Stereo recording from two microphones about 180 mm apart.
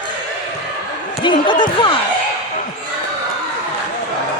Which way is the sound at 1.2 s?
25° left (ahead or behind).